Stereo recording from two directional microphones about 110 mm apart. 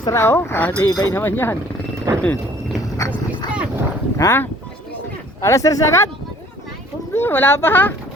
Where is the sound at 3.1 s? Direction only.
10° right (ahead or behind).